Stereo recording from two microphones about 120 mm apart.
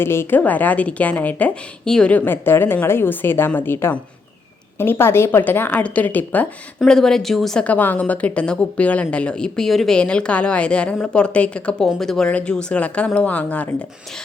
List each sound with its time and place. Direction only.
0.0 s a woman's voice: 20° left (ahead or behind)
6.7 s a woman's voice: 5° left (ahead or behind)